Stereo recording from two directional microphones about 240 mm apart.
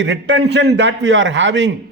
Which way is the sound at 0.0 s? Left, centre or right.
Right.